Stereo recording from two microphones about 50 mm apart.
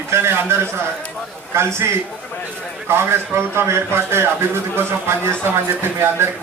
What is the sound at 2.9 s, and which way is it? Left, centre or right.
A man's voice, right.